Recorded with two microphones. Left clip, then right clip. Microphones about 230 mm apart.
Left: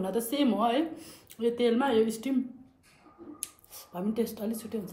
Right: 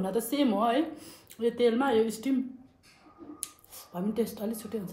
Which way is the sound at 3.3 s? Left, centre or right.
Centre.